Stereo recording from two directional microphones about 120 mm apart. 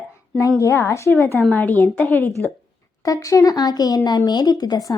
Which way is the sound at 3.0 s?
30° left (ahead or behind).